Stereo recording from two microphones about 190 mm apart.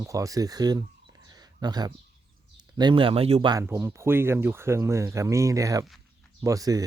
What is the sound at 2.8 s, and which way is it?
Speech, 25° right (ahead or behind).